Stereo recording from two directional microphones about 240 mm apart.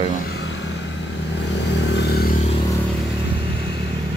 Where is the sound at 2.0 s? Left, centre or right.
Left.